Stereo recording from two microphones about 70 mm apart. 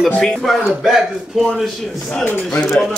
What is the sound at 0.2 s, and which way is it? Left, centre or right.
Speech, centre.